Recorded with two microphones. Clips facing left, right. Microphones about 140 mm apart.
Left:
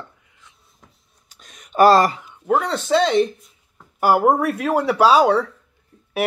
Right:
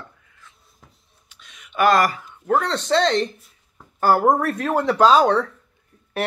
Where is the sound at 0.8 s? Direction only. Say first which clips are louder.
Even; centre (ahead or behind).